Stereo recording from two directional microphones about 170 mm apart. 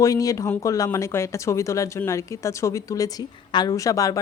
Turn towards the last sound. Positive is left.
turn(degrees=20)  # may be behind; listen again after turning